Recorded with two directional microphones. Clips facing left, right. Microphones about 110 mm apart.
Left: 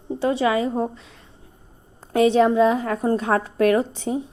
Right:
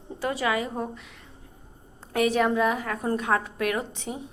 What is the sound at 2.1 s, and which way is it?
A woman's voice, 30° left (ahead or behind).